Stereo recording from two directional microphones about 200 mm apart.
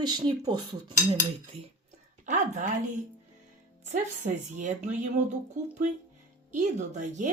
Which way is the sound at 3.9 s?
35° right (ahead or behind).